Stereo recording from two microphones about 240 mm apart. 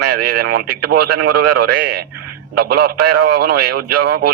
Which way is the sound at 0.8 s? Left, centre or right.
Right.